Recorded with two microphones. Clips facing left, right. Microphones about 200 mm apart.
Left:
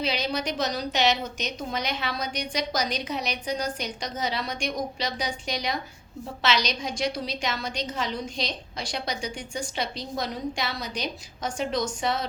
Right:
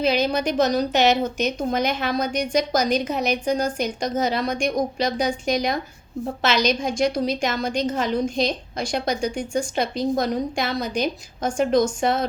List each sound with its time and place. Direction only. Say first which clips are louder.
0.0 s a woman's voice: right 7 dB; 50° right (ahead or behind)